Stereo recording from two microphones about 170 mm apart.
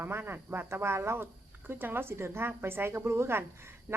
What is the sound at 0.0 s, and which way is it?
Speech, 15° right (ahead or behind).